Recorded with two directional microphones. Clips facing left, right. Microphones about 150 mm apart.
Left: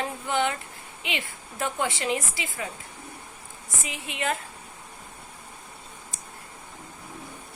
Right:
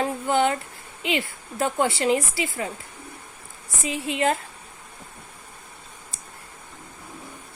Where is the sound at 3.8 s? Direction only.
30° right (ahead or behind).